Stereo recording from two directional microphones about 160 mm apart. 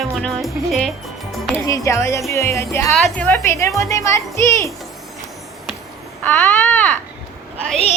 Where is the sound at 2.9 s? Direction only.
5° left (ahead or behind).